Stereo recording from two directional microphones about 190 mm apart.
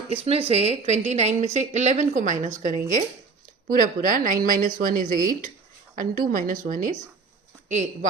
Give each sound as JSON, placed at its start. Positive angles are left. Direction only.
{"t": 0.3, "sound": "a woman's voice", "side_deg": -30}